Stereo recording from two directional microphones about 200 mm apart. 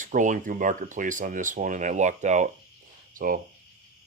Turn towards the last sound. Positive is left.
turn(degrees=-45)  # may be behind; listen again after turning